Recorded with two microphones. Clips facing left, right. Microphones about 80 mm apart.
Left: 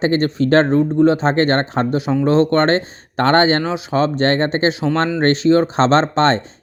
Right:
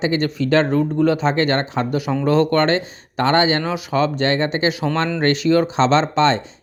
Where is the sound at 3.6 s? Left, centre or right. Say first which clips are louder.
Left 2 dB; left.